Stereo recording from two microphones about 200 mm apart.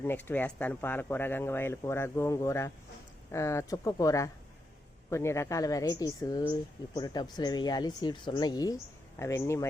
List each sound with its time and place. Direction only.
0.0 s speech: 10° left (ahead or behind)